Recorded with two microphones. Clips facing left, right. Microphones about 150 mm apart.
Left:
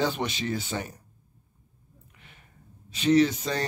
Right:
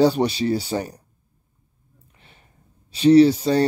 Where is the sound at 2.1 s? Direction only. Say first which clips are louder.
Right 2 dB; 30° right (ahead or behind).